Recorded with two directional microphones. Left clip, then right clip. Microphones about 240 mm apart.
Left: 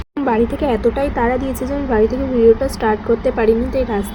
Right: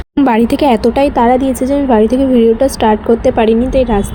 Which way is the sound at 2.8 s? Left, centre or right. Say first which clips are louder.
Right 7 dB; right.